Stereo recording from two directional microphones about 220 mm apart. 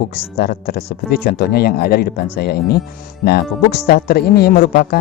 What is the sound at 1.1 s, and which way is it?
A man's voice, 45° left (ahead or behind).